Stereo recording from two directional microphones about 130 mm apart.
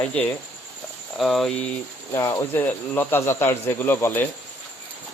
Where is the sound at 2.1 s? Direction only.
25° left (ahead or behind).